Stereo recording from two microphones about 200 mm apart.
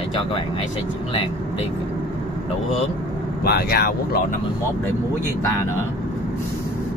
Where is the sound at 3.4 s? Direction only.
50° left (ahead or behind).